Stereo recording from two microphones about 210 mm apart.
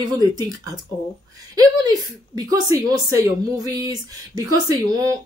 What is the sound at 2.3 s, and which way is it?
Speech, 15° right (ahead or behind).